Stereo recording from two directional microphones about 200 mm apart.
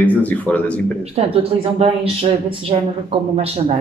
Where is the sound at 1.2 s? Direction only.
30° right (ahead or behind).